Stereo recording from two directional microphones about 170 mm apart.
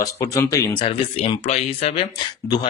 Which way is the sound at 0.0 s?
20° left (ahead or behind).